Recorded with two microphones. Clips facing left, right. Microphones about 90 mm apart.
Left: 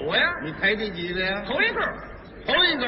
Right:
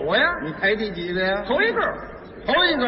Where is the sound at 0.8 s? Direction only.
20° right (ahead or behind).